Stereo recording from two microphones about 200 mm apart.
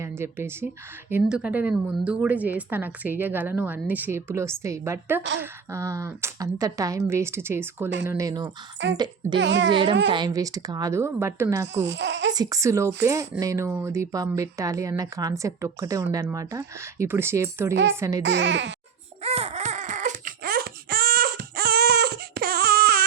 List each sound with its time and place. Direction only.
0.2 s a woman's voice: 10° right (ahead or behind)
8.9 s speech: 65° right (ahead or behind)
10.1 s a woman's voice: 20° right (ahead or behind)
11.9 s speech: 65° right (ahead or behind)
12.3 s a woman's voice: 20° right (ahead or behind)
18.2 s speech: 60° right (ahead or behind)
19.2 s baby cry: 30° right (ahead or behind); by 23.0 s 50° right (ahead or behind)